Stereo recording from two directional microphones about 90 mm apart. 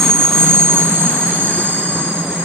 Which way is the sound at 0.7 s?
20° right (ahead or behind).